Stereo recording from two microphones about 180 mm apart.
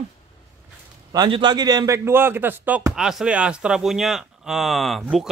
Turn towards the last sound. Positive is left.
turn(degrees=0)  # may be behind; listen again after turning